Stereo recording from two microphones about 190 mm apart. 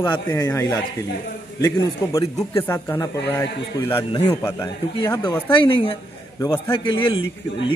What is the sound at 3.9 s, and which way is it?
Speech, 25° left (ahead or behind).